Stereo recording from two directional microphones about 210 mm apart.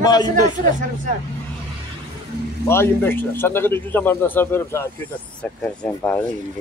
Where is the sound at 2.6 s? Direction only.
10° left (ahead or behind).